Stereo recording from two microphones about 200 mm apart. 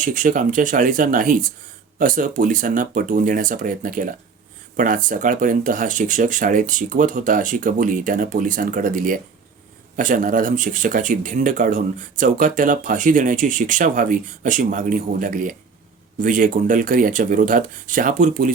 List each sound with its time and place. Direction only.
0.0 s speech: 40° right (ahead or behind)